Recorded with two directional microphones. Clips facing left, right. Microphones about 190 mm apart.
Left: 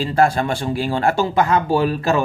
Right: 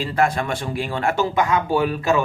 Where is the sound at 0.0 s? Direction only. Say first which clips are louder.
Left 4 dB; 30° left (ahead or behind).